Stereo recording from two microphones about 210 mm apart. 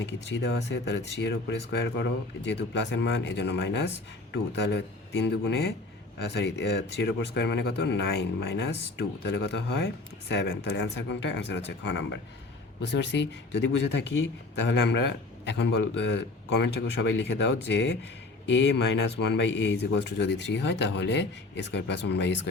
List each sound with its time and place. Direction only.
0.0 s speech: 55° left (ahead or behind)